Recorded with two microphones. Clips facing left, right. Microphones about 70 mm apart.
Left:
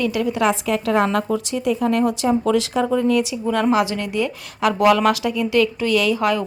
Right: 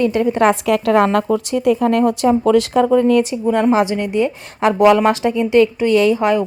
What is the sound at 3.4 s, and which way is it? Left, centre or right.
A woman's voice, centre.